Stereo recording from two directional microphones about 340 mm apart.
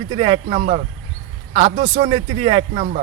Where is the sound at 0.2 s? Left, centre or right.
Centre.